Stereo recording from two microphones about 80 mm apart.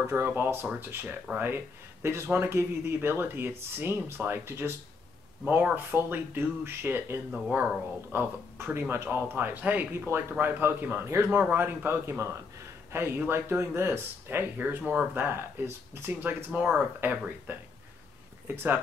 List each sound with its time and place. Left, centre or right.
0.1 s speech: right
7.2 s speech: centre
8.1 s speech: right
9.9 s speech: right
10.3 s speech: right